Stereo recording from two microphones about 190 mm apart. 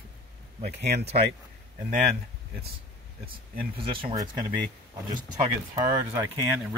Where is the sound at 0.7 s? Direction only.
60° right (ahead or behind).